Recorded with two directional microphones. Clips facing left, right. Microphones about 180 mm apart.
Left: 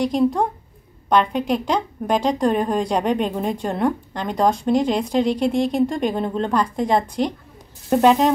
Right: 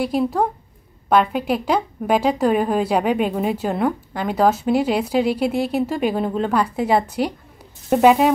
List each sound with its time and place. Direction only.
0.0 s a woman's voice: 5° right (ahead or behind)